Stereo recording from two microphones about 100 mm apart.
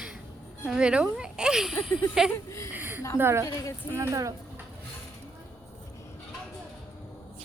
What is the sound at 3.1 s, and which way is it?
Speech, 25° right (ahead or behind).